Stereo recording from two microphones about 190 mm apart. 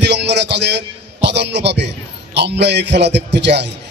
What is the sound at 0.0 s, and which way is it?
Music, 65° right (ahead or behind).